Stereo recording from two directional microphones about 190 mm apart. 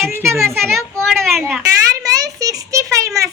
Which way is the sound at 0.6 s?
Centre (ahead or behind).